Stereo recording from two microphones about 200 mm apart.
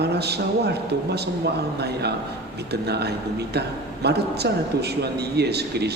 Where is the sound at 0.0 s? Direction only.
55° right (ahead or behind).